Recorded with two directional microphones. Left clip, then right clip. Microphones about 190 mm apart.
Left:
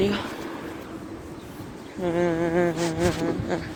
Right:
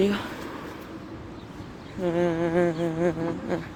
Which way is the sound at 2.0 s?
35° right (ahead or behind).